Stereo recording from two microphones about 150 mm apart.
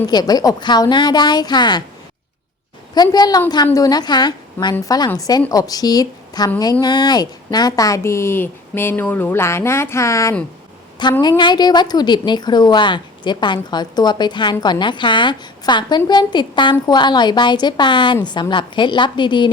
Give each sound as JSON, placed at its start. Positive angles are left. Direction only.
{"t": 0.1, "sound": "a woman's voice", "side_deg": 25}
{"t": 2.9, "sound": "a woman's voice", "side_deg": 25}